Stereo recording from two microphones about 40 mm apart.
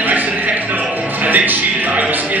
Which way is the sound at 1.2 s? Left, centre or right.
Right.